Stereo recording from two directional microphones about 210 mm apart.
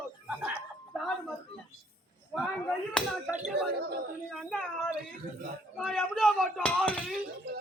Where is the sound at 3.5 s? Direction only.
50° right (ahead or behind).